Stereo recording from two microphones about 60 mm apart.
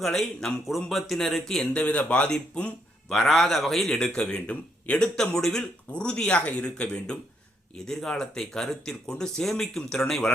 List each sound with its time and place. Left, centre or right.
0.0 s a man's voice: centre
1.7 s speech: centre
3.1 s a man's voice: centre